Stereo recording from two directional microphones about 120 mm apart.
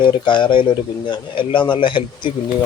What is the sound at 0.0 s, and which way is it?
Speech, 40° left (ahead or behind).